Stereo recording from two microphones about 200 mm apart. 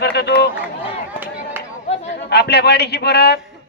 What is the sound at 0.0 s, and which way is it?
Run, 55° left (ahead or behind).